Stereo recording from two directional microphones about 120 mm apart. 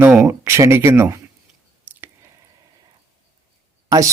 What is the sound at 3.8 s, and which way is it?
Speech, 30° right (ahead or behind).